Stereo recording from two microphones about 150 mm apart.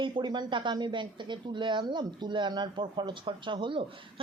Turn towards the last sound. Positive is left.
turn(degrees=-35)  # may be behind; listen again after turning